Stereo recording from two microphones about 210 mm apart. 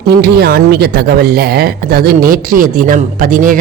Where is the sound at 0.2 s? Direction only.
50° right (ahead or behind).